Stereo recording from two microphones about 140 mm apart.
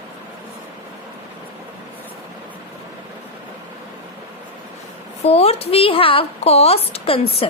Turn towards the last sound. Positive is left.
turn(degrees=45)  # may be behind; listen again after turning